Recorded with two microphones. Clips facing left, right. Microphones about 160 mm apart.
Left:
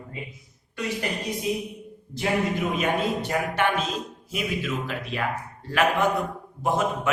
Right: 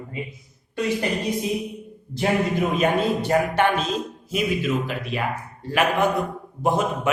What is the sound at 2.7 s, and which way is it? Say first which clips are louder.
Speech: right 4 dB; 30° right (ahead or behind).